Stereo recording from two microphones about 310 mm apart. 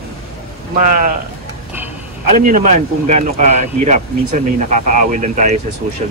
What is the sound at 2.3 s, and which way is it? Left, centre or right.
Speech, right.